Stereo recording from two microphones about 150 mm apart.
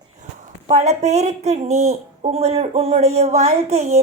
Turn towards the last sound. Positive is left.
turn(degrees=-45)  # may be behind; listen again after turning